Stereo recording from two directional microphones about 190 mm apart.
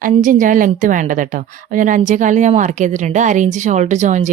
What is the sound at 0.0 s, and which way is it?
A woman's voice, 45° right (ahead or behind).